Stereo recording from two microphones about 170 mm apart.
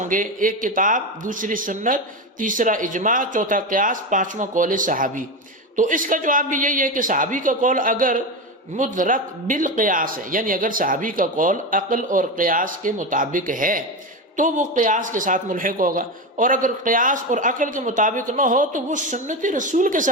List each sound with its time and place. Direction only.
0.0 s a man's voice: 50° right (ahead or behind)